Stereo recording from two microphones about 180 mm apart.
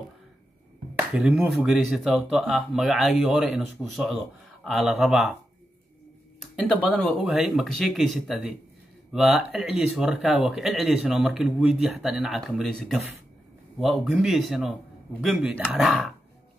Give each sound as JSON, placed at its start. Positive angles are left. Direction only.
{"t": 0.9, "sound": "speech", "side_deg": -5}
{"t": 6.4, "sound": "speech", "side_deg": 0}